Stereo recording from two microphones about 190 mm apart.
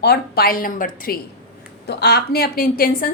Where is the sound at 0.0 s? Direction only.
55° left (ahead or behind).